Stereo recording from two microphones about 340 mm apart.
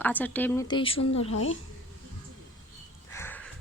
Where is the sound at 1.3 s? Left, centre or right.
Left.